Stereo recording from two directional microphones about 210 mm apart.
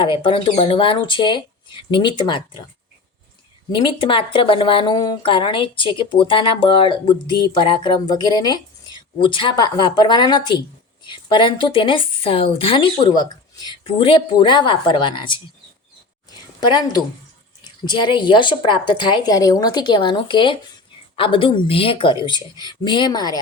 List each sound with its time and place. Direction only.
0.0 s speech: 25° left (ahead or behind)
3.7 s speech: 20° left (ahead or behind)
16.6 s speech: 20° left (ahead or behind)